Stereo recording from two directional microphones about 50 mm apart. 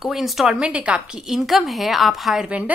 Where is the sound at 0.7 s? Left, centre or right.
Right; by 2.4 s centre.